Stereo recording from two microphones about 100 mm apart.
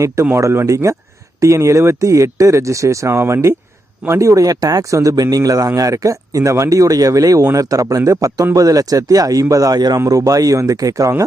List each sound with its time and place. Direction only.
0.3 s a man's voice: 30° right (ahead or behind)